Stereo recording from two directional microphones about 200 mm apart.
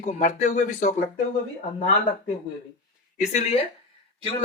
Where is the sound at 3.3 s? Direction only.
30° left (ahead or behind).